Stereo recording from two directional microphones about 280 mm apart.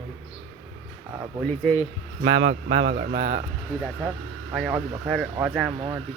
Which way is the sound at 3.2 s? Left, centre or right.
Centre.